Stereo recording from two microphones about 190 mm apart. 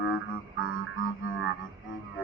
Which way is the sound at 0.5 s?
90° left.